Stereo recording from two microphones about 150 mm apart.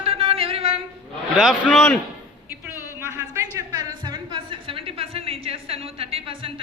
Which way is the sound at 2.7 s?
20° left (ahead or behind).